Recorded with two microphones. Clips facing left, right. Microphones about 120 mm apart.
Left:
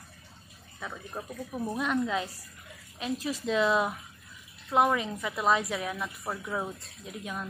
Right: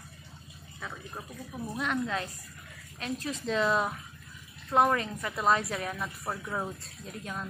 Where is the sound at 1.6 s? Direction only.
25° left (ahead or behind).